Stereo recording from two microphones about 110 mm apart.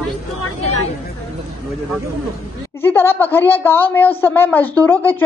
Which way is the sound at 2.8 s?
20° left (ahead or behind).